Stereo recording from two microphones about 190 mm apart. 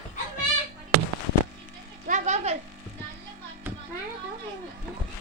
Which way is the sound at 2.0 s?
40° right (ahead or behind).